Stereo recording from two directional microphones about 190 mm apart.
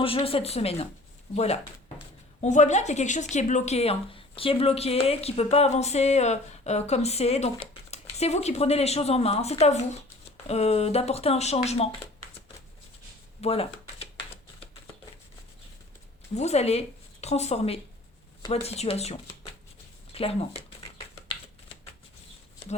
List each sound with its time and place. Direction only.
0.0 s speech: 30° left (ahead or behind)
2.4 s speech: 40° left (ahead or behind)
13.4 s a sound: 30° left (ahead or behind)
16.3 s speech: 35° left (ahead or behind)